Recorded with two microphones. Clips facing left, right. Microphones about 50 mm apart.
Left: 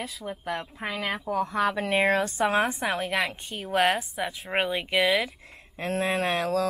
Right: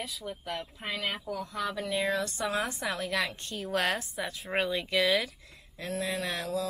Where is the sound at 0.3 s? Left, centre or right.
Left.